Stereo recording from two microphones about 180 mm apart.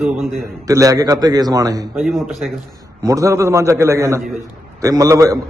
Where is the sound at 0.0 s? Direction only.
Centre (ahead or behind).